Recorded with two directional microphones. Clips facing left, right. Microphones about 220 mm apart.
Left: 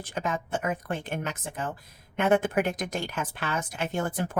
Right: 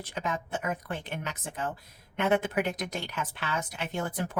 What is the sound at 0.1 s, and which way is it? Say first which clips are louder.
A woman's voice: left 3 dB; 50° left (ahead or behind).